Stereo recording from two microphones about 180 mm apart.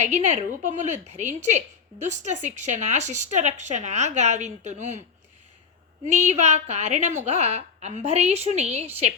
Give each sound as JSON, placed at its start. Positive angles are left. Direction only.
{"t": 0.0, "sound": "a woman's voice", "side_deg": -40}
{"t": 6.1, "sound": "a woman's voice", "side_deg": -40}